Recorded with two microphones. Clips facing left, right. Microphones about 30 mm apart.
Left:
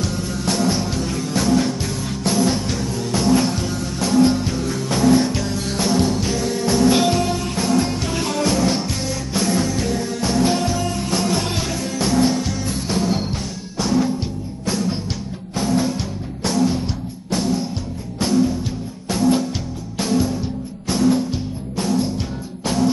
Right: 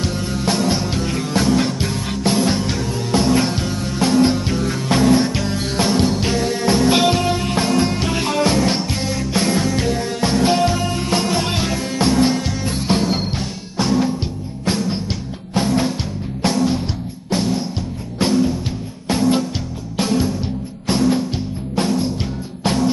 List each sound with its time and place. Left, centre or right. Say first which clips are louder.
0.5 s music: right 1 dB; right
1.6 s music: right 2 dB; right
5.3 s music: right 2 dB; right
6.2 s music: right 3 dB; right
8.0 s music: right 3 dB; right
8.8 s music: right 2 dB; right
9.3 s music: right 1 dB; right
11.1 s music: right 3 dB; right
12.6 s music: right 5 dB; right
16.0 s music: right 3 dB; right
18.2 s music: right 1 dB; right
19.5 s music: right 2 dB; centre
20.8 s music: even; right
21.8 s music: right 3 dB; right